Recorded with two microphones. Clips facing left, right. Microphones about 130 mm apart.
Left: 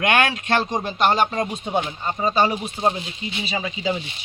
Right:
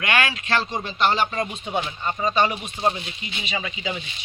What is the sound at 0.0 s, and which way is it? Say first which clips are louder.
Speech: left 4 dB; 50° left (ahead or behind).